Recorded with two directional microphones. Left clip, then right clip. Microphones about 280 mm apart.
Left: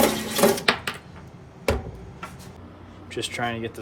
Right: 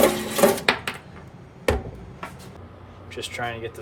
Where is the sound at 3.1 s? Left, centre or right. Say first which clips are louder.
Left 2 dB; left.